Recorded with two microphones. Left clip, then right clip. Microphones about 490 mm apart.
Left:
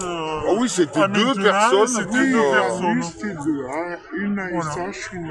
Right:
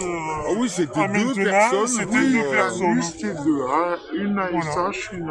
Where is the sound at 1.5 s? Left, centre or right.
Centre.